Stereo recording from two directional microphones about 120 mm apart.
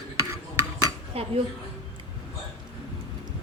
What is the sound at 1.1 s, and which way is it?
Speech, 55° right (ahead or behind).